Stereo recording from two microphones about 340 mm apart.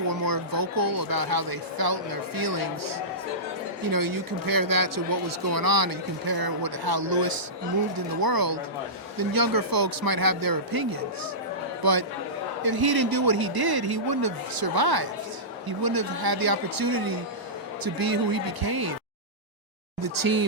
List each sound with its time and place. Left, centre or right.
0.1 s speech: right
9.1 s speech: right
11.8 s a man's voice: right
20.0 s speech: right